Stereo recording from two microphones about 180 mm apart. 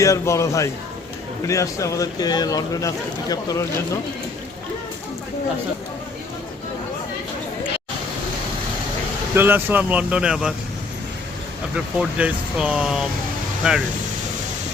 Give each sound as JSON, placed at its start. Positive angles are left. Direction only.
{"t": 0.0, "sound": "a man's voice", "side_deg": 15}
{"t": 9.3, "sound": "speech", "side_deg": -10}
{"t": 11.9, "sound": "speech", "side_deg": -5}